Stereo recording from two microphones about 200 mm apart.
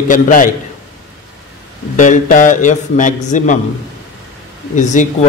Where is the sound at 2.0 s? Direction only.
40° left (ahead or behind).